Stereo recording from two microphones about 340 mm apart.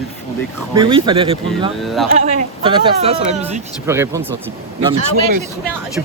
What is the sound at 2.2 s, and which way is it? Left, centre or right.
Speech, centre.